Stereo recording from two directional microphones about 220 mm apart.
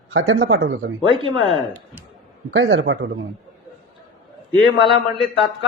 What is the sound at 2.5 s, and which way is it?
Speech, 60° right (ahead or behind).